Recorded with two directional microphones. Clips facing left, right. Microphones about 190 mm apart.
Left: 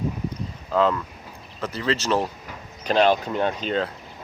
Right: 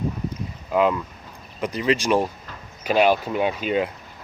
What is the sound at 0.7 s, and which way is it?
Speech, 15° right (ahead or behind).